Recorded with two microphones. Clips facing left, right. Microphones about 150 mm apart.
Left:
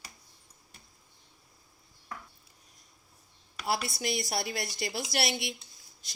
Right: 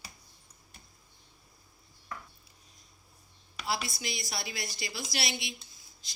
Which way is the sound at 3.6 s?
60° left (ahead or behind).